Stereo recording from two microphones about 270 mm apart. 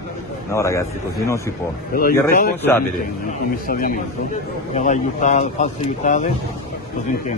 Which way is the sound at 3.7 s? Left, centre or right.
Left.